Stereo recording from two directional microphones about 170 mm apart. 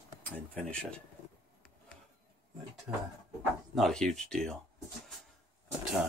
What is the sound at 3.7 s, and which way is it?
Speech, centre (ahead or behind).